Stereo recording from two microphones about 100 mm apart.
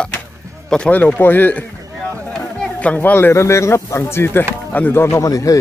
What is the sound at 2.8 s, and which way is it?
A man's voice, 15° left (ahead or behind).